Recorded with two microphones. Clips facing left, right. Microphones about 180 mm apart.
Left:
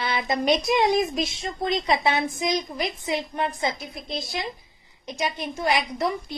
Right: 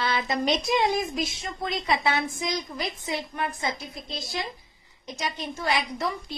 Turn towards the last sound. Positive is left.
turn(degrees=15)  # may be behind; listen again after turning